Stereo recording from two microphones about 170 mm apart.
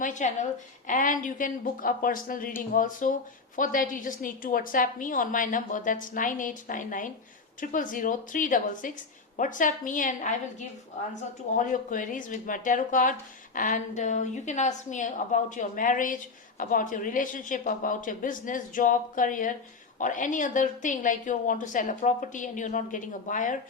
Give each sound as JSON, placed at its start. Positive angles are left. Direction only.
{"t": 0.0, "sound": "a woman's voice", "side_deg": 45}